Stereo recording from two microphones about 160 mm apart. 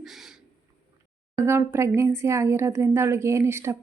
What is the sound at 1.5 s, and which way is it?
Speech, 15° right (ahead or behind).